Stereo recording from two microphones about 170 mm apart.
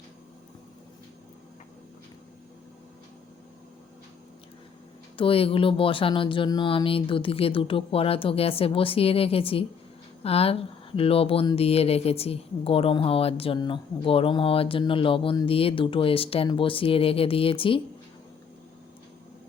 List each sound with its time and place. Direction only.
5.1 s speech: 30° left (ahead or behind)